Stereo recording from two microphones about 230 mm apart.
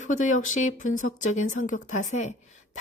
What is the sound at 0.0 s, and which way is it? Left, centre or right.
A woman's voice, left.